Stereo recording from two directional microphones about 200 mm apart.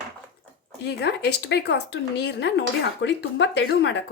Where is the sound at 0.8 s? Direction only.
55° left (ahead or behind).